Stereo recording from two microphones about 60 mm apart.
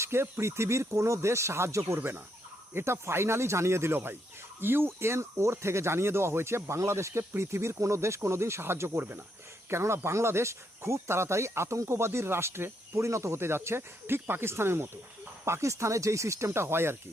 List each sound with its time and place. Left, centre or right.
0.0 s speech: right
2.0 s speech: right
2.7 s speech: right
9.0 s speech: right
9.6 s speech: right
16.5 s speech: right